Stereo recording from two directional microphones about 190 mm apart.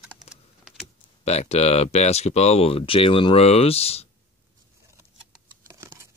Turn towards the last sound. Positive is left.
turn(degrees=-15)  # may be behind; listen again after turning